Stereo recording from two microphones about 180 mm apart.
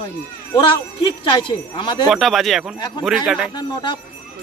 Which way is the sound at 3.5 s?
25° left (ahead or behind).